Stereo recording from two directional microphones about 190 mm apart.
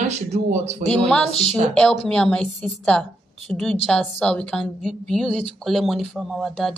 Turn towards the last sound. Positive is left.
turn(degrees=0)  # may be behind; listen again after turning